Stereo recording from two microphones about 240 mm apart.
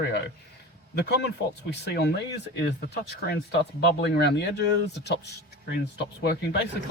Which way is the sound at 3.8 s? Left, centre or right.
Left.